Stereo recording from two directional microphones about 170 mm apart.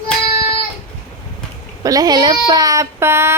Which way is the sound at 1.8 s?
20° right (ahead or behind).